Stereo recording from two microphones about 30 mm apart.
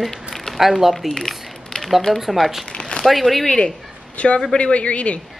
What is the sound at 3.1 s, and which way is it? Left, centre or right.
Speech, centre.